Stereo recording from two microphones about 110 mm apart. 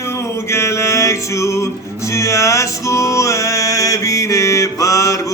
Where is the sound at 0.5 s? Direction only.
25° left (ahead or behind).